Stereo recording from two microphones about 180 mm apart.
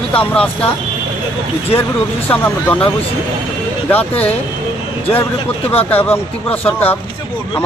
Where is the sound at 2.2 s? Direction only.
10° left (ahead or behind).